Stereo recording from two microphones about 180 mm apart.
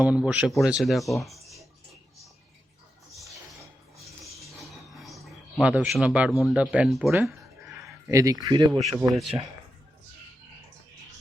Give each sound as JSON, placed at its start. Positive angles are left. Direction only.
{"t": 0.0, "sound": "speech", "side_deg": -5}
{"t": 4.2, "sound": "a sound", "side_deg": 0}
{"t": 6.4, "sound": "speech", "side_deg": -5}
{"t": 8.0, "sound": "speech", "side_deg": -20}
{"t": 9.0, "sound": "speech", "side_deg": 0}